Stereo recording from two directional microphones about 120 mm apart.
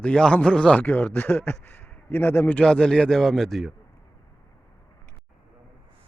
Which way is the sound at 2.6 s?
5° left (ahead or behind).